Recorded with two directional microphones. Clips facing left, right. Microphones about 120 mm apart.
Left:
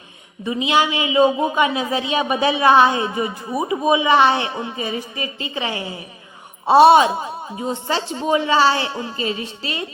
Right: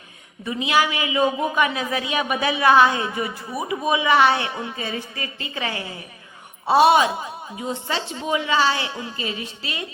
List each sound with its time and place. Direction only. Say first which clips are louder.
0.4 s a man's voice: left 3 dB; 20° left (ahead or behind)
6.7 s a woman's voice: left 5 dB; 30° left (ahead or behind)